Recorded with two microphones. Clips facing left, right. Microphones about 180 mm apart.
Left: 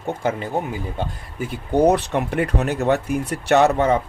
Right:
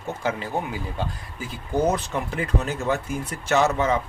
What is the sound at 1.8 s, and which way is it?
Speech, 65° left (ahead or behind).